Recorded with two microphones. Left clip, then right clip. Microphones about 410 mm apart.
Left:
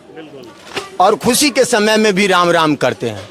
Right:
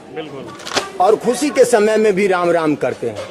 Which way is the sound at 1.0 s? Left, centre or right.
Left.